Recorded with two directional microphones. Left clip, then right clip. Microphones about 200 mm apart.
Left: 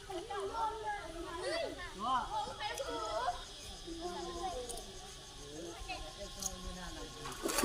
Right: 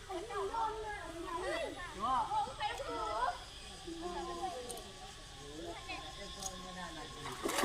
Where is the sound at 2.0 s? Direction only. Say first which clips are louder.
Even; 25° left (ahead or behind).